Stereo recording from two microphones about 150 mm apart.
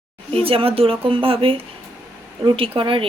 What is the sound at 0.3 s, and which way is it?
A woman's voice, 40° right (ahead or behind).